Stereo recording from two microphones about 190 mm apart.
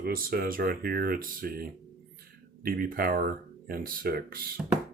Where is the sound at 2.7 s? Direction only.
50° right (ahead or behind).